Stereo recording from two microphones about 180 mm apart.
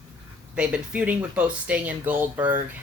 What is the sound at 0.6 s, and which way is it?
Speech, 5° right (ahead or behind).